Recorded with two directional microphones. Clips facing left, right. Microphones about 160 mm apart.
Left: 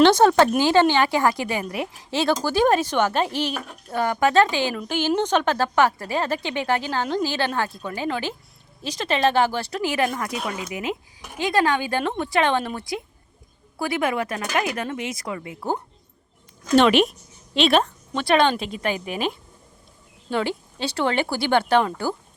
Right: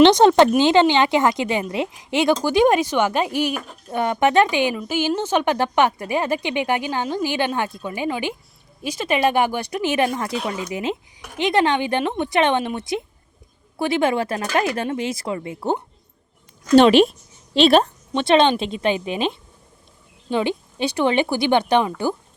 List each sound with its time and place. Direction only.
0.0 s speech: 20° right (ahead or behind)
4.7 s a woman's voice: 5° right (ahead or behind); by 17.8 s 35° right (ahead or behind)
18.1 s speech: 20° right (ahead or behind)